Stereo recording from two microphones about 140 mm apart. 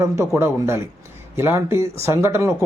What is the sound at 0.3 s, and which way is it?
Speech, 20° right (ahead or behind).